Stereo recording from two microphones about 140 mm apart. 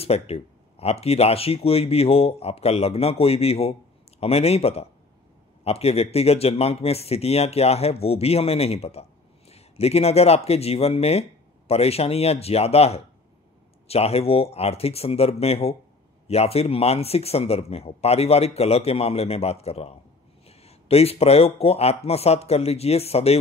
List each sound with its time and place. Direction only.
0.0 s speech: 45° left (ahead or behind)